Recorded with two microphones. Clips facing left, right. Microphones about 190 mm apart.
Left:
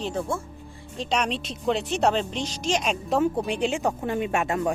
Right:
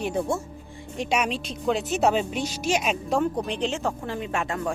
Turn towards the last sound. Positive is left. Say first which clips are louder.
# left 3 dB
turn(degrees=20)  # may be behind; listen again after turning